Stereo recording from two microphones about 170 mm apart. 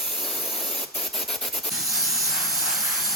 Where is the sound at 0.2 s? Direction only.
Centre (ahead or behind).